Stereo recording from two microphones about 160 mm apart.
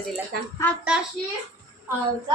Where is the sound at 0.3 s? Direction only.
90° right.